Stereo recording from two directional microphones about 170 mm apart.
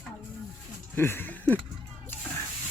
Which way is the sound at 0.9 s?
15° left (ahead or behind).